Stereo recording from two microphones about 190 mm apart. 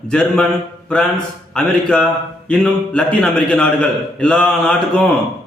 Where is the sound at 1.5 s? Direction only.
5° left (ahead or behind).